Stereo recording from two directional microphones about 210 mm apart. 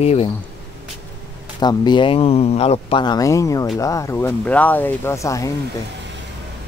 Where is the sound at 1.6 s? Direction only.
20° left (ahead or behind).